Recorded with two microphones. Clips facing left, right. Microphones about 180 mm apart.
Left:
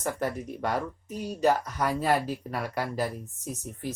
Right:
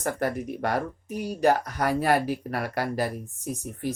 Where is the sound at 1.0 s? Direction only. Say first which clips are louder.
Right 3 dB; 10° right (ahead or behind).